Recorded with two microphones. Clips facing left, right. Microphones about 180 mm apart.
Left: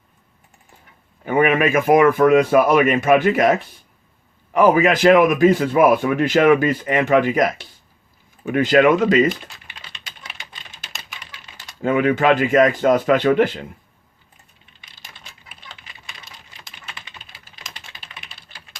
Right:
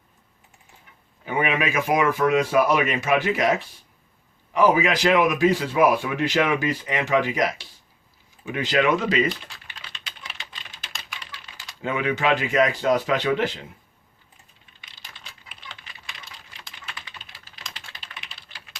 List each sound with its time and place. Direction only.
1.2 s a man's voice: 50° left (ahead or behind)
11.5 s a man's voice: 50° left (ahead or behind)